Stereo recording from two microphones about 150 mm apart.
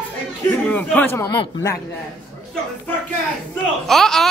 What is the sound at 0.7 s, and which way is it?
Speech, 10° left (ahead or behind).